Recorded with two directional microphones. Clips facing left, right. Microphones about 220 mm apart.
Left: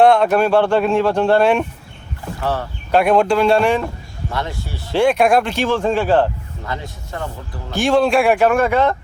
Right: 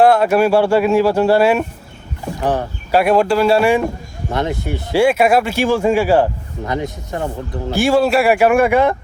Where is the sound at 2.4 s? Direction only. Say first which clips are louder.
Right 4 dB; 20° right (ahead or behind).